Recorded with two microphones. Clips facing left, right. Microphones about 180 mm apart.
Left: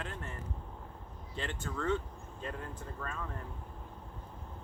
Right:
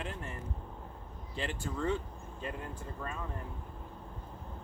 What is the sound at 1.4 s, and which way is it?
Speech, 10° right (ahead or behind).